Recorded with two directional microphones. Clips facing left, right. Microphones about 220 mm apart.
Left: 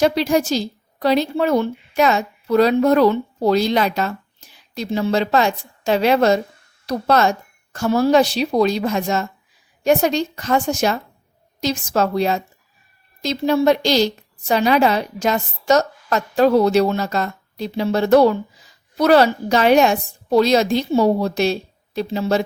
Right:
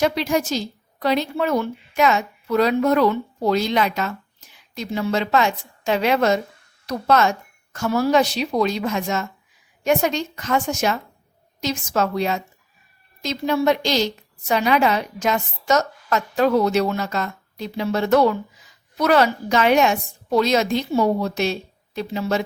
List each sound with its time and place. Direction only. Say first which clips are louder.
0.0 s a woman's voice: left 4 dB; 35° left (ahead or behind)